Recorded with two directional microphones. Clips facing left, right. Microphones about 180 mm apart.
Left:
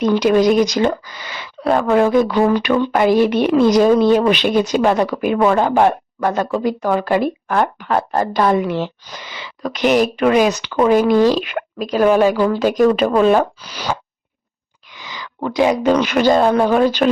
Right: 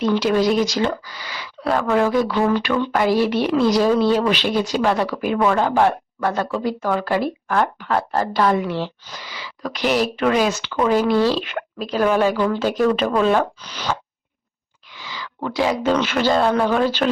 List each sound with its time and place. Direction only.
0.0 s speech: 15° left (ahead or behind)
14.9 s a sound: 15° left (ahead or behind)
15.4 s speech: 15° left (ahead or behind)